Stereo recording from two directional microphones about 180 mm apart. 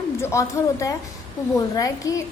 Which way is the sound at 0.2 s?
15° left (ahead or behind).